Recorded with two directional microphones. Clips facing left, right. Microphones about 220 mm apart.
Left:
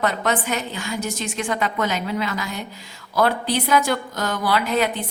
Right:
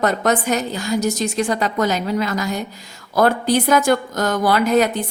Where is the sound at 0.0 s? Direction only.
45° right (ahead or behind).